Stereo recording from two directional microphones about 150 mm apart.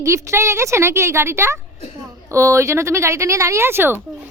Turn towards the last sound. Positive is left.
turn(degrees=-15)  # may be behind; listen again after turning